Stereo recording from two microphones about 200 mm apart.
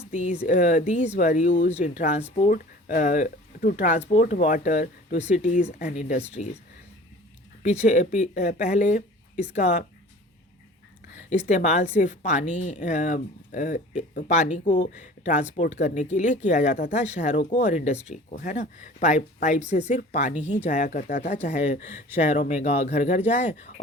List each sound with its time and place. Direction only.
0.1 s speech: 35° left (ahead or behind)
7.6 s speech: 35° left (ahead or behind)
11.3 s speech: 35° left (ahead or behind)